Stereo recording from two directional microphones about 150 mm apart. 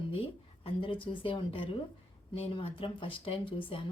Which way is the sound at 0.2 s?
35° left (ahead or behind).